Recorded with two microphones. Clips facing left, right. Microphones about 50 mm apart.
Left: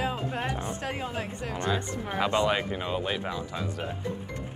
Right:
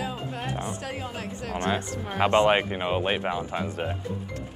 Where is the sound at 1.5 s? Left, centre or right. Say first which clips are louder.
Right 2 dB; right.